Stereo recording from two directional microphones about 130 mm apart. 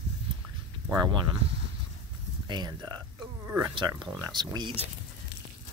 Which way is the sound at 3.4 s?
20° right (ahead or behind).